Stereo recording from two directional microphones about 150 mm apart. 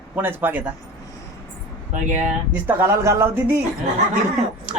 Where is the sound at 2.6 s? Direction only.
15° right (ahead or behind).